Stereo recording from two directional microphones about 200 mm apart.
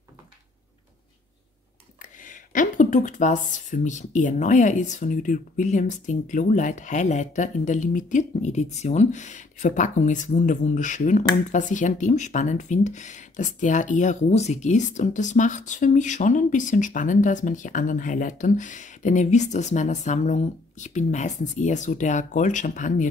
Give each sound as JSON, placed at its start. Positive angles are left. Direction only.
{"t": 2.0, "sound": "speech", "side_deg": 40}